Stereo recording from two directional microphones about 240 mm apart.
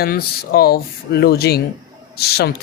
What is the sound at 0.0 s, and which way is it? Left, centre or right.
A man's voice, left.